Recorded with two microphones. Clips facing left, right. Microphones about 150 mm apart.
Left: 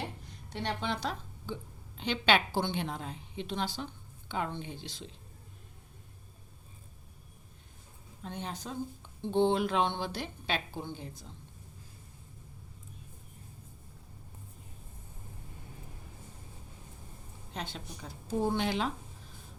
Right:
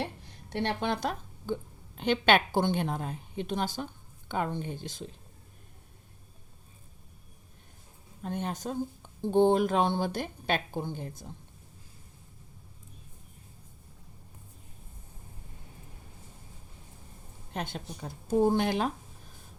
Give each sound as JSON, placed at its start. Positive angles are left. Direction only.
{"t": 0.5, "sound": "a woman's voice", "side_deg": -60}
{"t": 8.2, "sound": "a woman's voice", "side_deg": -50}
{"t": 17.5, "sound": "a woman's voice", "side_deg": -50}